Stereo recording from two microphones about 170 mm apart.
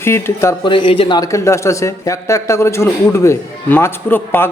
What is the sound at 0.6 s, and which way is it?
A man's voice, 30° left (ahead or behind).